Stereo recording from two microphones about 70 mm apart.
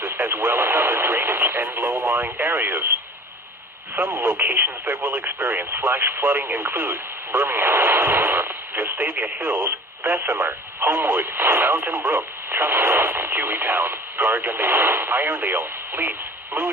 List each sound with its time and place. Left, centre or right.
0.0 s radio: right
2.1 s speech: right
4.1 s speech: right